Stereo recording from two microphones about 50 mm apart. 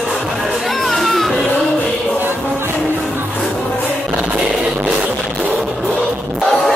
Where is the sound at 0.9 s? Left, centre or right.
Centre.